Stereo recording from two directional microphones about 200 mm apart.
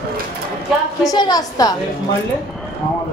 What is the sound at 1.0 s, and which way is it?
Speech, 20° left (ahead or behind).